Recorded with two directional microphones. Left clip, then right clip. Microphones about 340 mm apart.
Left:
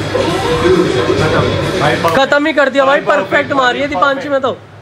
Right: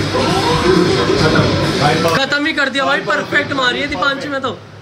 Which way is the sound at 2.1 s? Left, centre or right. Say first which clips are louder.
Left 5 dB; centre.